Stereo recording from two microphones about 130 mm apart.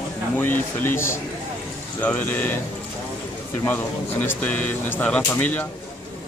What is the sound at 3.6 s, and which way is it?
Speech, 15° left (ahead or behind).